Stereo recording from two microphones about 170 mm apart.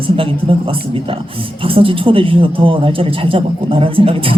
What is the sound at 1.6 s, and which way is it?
A man's voice, 30° right (ahead or behind).